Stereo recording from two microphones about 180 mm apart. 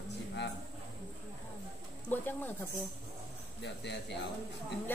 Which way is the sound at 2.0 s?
10° left (ahead or behind).